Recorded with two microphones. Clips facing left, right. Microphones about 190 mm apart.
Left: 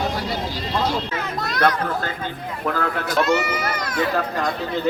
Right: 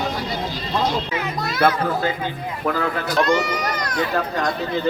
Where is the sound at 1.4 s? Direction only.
5° right (ahead or behind).